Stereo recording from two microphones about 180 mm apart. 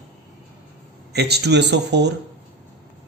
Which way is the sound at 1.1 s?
65° right (ahead or behind).